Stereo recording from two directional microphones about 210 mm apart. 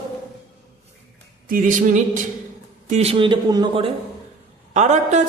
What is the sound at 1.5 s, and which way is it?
A woman's voice, 40° right (ahead or behind).